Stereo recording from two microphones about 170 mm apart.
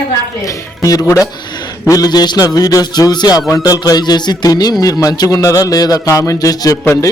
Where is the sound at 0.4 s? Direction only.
20° left (ahead or behind).